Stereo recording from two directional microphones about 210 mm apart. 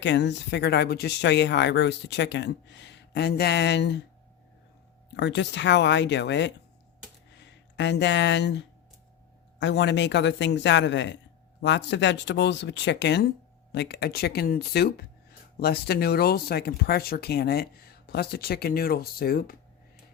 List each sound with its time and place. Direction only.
0.0 s speech: 55° left (ahead or behind)
5.1 s speech: 55° left (ahead or behind)